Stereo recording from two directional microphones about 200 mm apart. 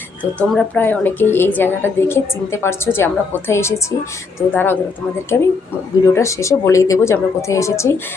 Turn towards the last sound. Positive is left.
turn(degrees=15)  # may be behind; listen again after turning